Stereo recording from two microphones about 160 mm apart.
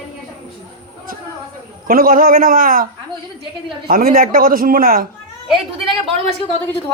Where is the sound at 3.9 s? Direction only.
60° right (ahead or behind).